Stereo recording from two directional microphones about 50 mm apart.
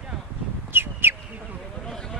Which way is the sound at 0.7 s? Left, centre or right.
Right.